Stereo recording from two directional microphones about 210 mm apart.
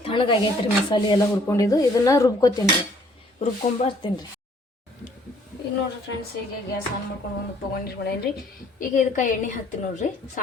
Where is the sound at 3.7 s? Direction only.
25° left (ahead or behind).